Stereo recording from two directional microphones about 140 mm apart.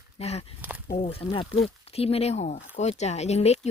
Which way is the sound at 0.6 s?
10° right (ahead or behind).